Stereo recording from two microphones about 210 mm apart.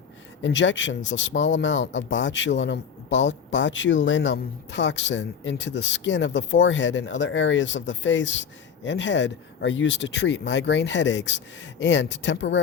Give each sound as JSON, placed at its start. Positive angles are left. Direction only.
{"t": 0.4, "sound": "speech", "side_deg": 60}